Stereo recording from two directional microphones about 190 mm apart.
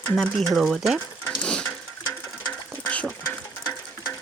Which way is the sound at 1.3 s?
5° left (ahead or behind).